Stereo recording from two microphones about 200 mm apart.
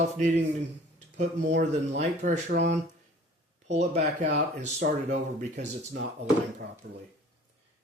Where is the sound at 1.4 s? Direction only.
60° right (ahead or behind).